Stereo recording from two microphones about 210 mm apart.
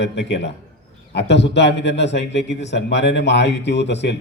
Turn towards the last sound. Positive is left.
turn(degrees=55)  # may be behind; listen again after turning